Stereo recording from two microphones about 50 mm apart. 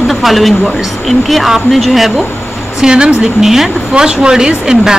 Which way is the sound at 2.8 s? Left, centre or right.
Centre.